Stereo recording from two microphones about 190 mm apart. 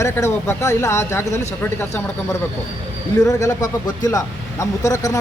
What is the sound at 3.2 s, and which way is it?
A man's voice, 20° left (ahead or behind).